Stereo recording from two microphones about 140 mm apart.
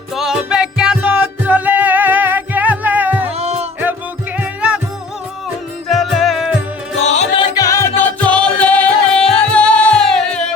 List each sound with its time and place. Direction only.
0.1 s music: centre (ahead or behind)
3.3 s music: 50° right (ahead or behind)
3.8 s music: 10° right (ahead or behind)
5.9 s music: centre (ahead or behind)
7.0 s music: 55° left (ahead or behind)
7.3 s music: 25° left (ahead or behind); by 10.4 s 5° left (ahead or behind)